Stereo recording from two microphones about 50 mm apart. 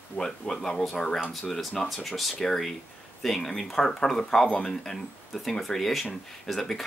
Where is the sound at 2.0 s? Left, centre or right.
Centre.